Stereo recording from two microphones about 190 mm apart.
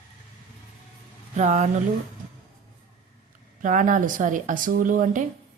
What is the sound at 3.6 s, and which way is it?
Speech, 45° right (ahead or behind).